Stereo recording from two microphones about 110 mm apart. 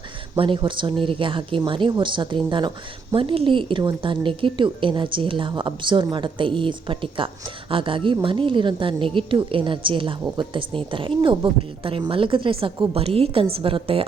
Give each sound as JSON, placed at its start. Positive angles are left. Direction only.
{"t": 0.3, "sound": "a woman's voice", "side_deg": -50}